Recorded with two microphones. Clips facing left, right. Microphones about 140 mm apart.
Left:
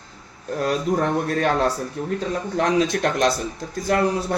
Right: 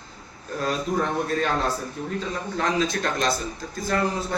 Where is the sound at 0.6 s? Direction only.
60° left (ahead or behind).